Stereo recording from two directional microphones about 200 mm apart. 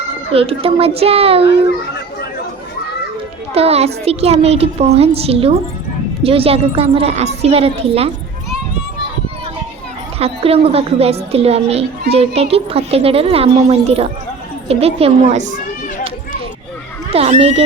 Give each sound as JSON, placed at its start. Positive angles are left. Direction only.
{"t": 0.3, "sound": "a woman's voice", "side_deg": -30}
{"t": 3.5, "sound": "a child's voice", "side_deg": -30}
{"t": 10.2, "sound": "a child's voice", "side_deg": -30}
{"t": 17.1, "sound": "a woman's voice", "side_deg": -30}